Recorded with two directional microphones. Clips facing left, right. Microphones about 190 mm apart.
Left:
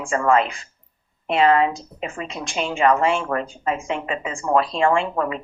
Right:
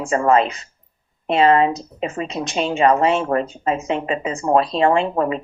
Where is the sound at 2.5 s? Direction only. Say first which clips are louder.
Right 2 dB; 30° right (ahead or behind).